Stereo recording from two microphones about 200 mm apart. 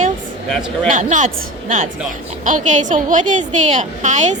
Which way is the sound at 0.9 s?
40° right (ahead or behind).